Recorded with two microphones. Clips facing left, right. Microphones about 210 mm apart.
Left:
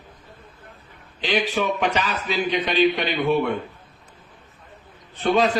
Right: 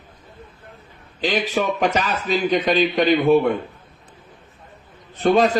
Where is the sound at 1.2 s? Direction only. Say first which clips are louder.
Right 2 dB; 40° right (ahead or behind).